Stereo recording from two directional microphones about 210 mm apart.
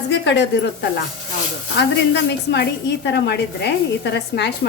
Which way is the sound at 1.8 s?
55° left (ahead or behind).